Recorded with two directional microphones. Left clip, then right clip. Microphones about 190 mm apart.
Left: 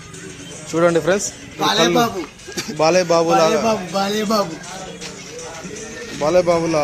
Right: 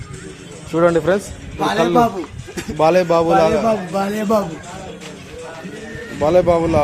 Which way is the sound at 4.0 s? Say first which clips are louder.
Left 1 dB; 30° right (ahead or behind).